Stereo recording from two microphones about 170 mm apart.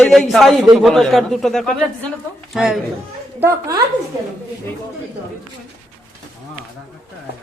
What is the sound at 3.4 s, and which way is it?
Speech, 20° right (ahead or behind).